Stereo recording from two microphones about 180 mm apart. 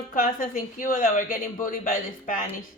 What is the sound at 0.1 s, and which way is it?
A woman's voice, 50° left (ahead or behind).